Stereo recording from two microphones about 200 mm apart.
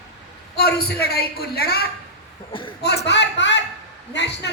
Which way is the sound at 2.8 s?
55° left (ahead or behind).